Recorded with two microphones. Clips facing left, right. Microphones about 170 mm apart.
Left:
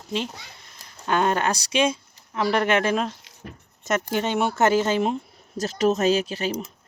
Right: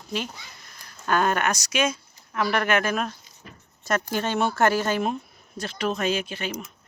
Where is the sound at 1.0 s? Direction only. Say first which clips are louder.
Left 1 dB; 20° left (ahead or behind).